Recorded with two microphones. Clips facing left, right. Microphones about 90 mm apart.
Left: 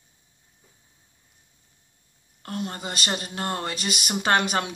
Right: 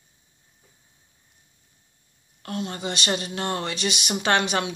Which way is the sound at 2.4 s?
40° left (ahead or behind).